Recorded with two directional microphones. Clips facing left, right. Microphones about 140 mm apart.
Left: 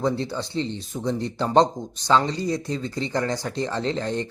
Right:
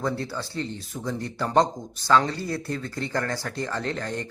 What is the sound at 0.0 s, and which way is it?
Speech, 20° left (ahead or behind).